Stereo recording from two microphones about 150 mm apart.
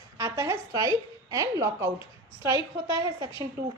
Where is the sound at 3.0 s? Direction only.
25° right (ahead or behind).